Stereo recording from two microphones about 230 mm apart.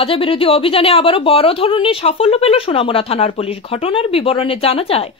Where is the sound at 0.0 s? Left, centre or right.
Left.